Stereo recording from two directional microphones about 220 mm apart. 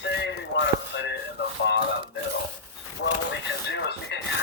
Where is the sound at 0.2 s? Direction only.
55° left (ahead or behind).